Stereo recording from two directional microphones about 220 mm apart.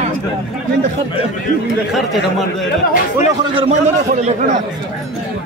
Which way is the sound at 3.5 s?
30° right (ahead or behind).